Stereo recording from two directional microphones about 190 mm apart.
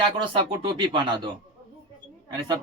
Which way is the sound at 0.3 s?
25° right (ahead or behind).